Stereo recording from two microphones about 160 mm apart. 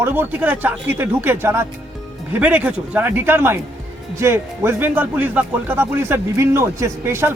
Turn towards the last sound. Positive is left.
turn(degrees=-15)  # may be behind; listen again after turning